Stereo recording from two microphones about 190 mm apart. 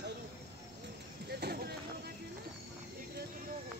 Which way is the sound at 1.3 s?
60° right (ahead or behind).